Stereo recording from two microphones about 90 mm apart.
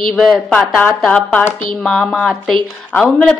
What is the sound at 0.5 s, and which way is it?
Speech, 15° left (ahead or behind).